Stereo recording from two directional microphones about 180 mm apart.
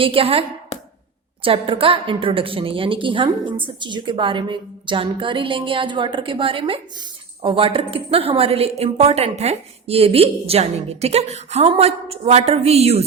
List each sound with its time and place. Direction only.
0.0 s a woman's voice: 30° right (ahead or behind)